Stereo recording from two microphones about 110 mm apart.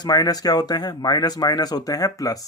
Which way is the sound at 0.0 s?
35° left (ahead or behind).